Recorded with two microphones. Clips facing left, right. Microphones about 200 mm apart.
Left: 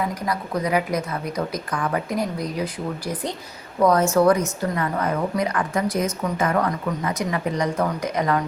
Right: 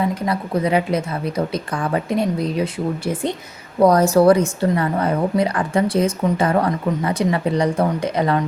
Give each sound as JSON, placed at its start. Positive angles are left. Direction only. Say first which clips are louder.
{"t": 0.1, "sound": "a woman's voice", "louder": "right 4 dB", "side_deg": -25}
{"t": 3.8, "sound": "a woman's voice", "louder": "right 4 dB", "side_deg": -35}